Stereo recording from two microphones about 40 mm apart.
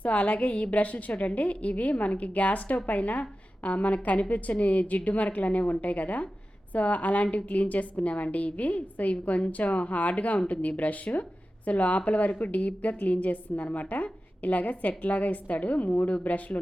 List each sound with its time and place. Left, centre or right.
0.0 s a woman's voice: left